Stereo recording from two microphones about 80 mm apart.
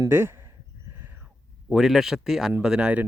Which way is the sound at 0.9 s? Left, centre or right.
Right.